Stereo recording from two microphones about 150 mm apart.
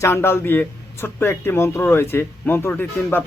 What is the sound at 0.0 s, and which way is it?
A man's voice, 15° left (ahead or behind).